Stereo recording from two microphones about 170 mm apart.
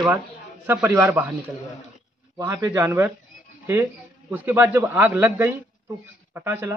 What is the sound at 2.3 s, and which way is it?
Speech, 20° right (ahead or behind).